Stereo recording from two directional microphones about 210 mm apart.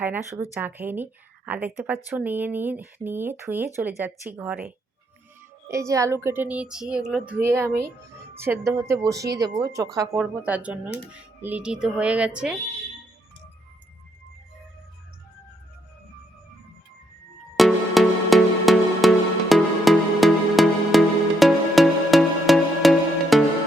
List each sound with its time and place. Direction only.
0.0 s speech: 10° right (ahead or behind)
17.6 s music: centre (ahead or behind)